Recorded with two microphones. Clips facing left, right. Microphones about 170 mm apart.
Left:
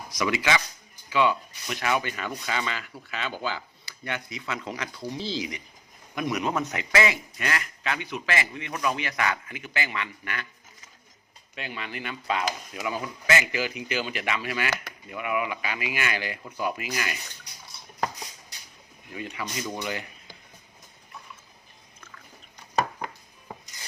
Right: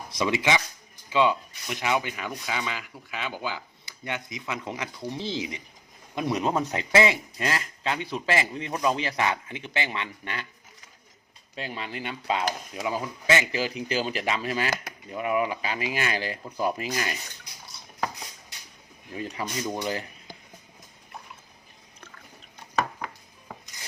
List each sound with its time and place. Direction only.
0.1 s speech: 25° right (ahead or behind)
11.5 s speech: 30° right (ahead or behind)
19.1 s speech: 35° right (ahead or behind)